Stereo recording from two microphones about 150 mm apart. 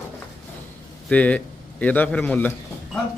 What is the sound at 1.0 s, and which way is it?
Speech, 10° left (ahead or behind).